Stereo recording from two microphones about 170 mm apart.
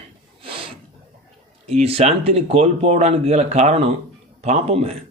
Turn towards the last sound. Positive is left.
turn(degrees=-35)  # may be behind; listen again after turning